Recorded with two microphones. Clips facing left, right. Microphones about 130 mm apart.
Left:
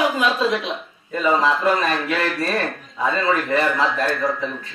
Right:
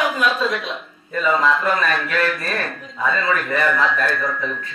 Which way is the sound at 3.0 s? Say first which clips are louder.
Left 1 dB; 25° left (ahead or behind).